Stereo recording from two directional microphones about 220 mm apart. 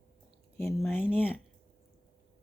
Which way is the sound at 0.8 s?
Centre (ahead or behind).